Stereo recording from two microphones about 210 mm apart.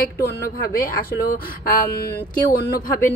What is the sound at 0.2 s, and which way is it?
Speech, 45° left (ahead or behind).